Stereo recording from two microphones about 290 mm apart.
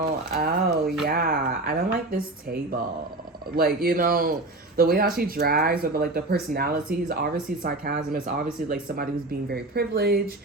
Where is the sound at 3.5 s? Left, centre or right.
Right.